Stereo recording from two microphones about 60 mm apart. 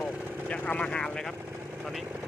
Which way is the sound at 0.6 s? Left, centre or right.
Left.